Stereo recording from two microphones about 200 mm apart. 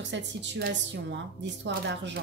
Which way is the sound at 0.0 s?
65° right (ahead or behind).